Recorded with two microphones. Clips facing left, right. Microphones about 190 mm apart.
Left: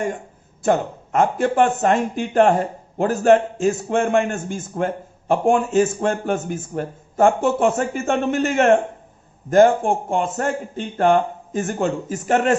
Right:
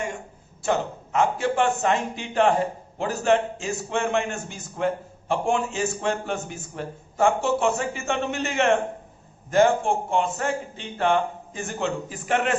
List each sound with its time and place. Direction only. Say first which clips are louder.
0.6 s speech: left 5 dB; 50° left (ahead or behind)